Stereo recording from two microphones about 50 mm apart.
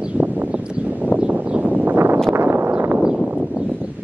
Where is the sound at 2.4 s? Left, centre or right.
Right.